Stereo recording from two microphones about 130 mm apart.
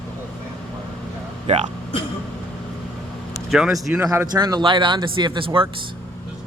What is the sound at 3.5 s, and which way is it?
Speech, 5° right (ahead or behind).